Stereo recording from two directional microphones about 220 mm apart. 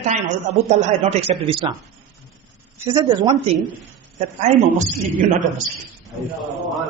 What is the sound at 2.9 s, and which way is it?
Speech, 20° right (ahead or behind).